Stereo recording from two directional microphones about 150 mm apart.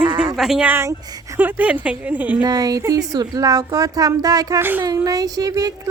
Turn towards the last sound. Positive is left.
turn(degrees=-25)  # may be behind; listen again after turning